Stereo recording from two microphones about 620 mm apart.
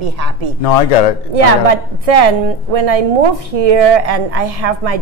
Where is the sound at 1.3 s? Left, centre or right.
Right.